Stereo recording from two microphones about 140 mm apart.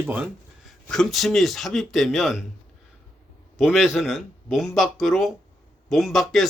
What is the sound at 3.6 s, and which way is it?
Speech, 5° right (ahead or behind).